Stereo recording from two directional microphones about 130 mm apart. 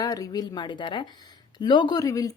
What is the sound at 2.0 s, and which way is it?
Speech, 25° left (ahead or behind).